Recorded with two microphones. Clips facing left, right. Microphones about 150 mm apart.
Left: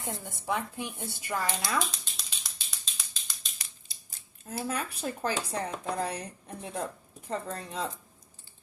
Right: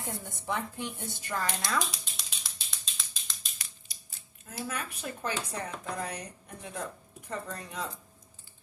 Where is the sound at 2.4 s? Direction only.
Centre (ahead or behind).